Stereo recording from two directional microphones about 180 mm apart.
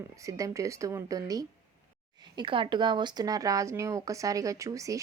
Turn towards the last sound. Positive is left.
turn(degrees=-20)  # may be behind; listen again after turning